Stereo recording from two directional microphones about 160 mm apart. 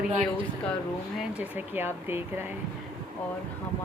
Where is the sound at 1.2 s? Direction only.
10° right (ahead or behind).